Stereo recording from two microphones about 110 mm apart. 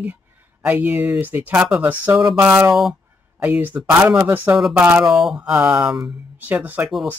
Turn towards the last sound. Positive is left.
turn(degrees=-15)  # may be behind; listen again after turning